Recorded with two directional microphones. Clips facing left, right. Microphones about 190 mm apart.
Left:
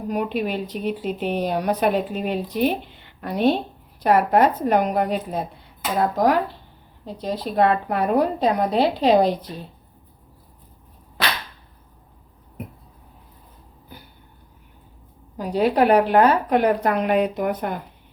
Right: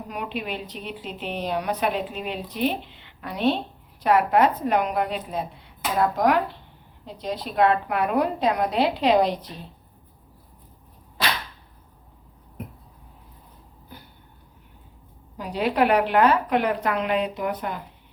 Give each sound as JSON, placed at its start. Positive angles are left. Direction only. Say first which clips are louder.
{"t": 0.3, "sound": "a woman's voice", "louder": "left 6 dB", "side_deg": 45}
{"t": 7.5, "sound": "a woman's voice", "louder": "left 1 dB", "side_deg": 35}
{"t": 15.4, "sound": "a woman's voice", "louder": "left 4 dB", "side_deg": 40}